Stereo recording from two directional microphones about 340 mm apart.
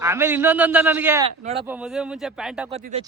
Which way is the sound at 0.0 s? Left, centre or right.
Centre.